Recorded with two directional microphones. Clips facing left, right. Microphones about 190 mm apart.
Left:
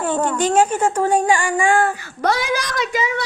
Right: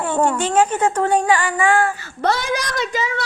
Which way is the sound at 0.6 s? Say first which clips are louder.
Right 1 dB; 10° left (ahead or behind).